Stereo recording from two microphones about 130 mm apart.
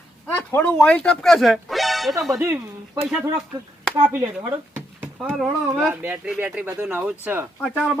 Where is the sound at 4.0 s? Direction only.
15° right (ahead or behind).